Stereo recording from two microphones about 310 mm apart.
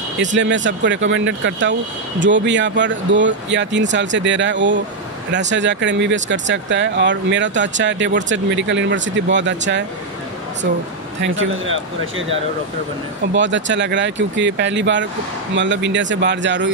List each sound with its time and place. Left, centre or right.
0.2 s speech: right
11.1 s speech: right